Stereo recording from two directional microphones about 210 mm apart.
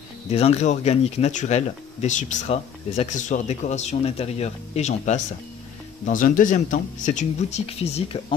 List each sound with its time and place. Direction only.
0.3 s speech: 30° left (ahead or behind)